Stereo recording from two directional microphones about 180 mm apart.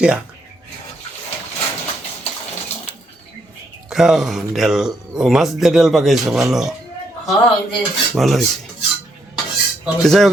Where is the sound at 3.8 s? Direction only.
Centre (ahead or behind).